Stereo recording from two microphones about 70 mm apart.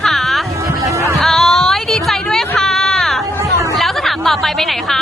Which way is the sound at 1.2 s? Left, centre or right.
Centre.